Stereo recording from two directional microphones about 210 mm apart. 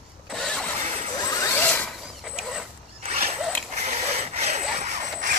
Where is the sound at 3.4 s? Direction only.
Centre (ahead or behind).